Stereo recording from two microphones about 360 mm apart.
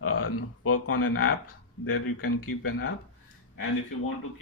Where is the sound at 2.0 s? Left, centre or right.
Left.